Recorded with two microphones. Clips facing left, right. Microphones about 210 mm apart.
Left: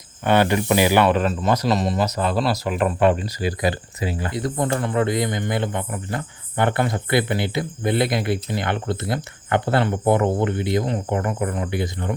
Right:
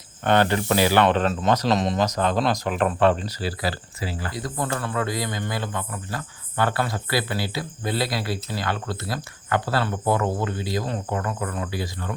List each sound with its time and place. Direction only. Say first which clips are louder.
0.3 s speech: left 2 dB; 10° left (ahead or behind)